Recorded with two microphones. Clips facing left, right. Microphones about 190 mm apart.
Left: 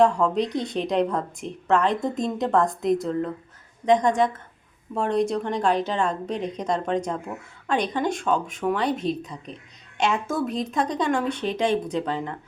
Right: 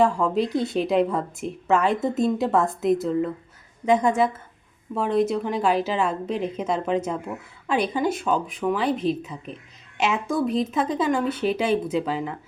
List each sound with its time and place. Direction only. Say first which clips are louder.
0.0 s a woman's voice: left 1 dB; 5° right (ahead or behind)